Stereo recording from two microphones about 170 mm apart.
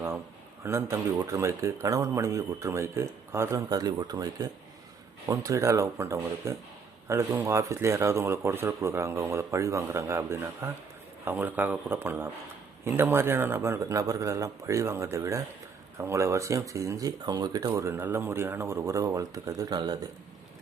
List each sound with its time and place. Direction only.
0.6 s speech: 15° right (ahead or behind)